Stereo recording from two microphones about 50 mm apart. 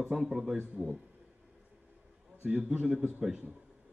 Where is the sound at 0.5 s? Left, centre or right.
Right.